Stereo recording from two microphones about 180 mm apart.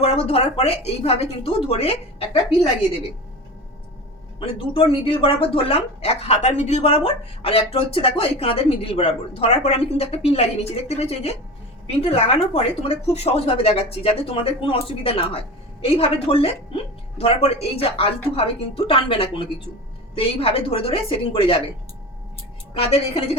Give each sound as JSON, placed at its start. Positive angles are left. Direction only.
{"t": 0.0, "sound": "speech", "side_deg": 35}
{"t": 4.4, "sound": "speech", "side_deg": 30}
{"t": 22.7, "sound": "speech", "side_deg": 30}